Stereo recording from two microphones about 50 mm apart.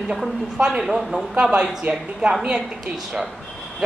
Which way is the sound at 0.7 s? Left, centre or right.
Centre.